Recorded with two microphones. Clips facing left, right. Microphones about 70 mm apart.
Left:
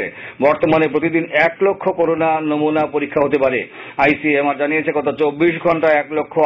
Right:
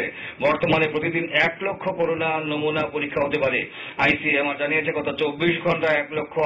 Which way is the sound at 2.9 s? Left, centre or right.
Left.